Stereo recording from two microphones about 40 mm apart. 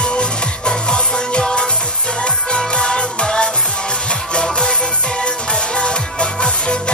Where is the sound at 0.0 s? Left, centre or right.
Left.